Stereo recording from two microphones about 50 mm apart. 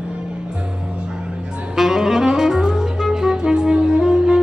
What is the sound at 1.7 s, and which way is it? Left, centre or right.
Saxophone, centre.